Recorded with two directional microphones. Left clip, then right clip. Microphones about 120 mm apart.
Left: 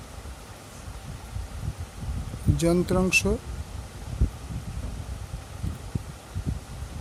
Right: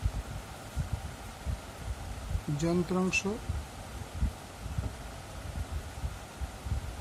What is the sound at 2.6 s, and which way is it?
Speech, 90° left.